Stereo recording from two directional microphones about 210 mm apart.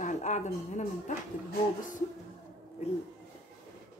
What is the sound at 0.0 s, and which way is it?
Speech, 35° left (ahead or behind).